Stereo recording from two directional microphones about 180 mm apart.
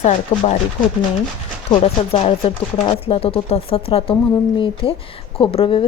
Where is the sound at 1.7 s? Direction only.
30° left (ahead or behind).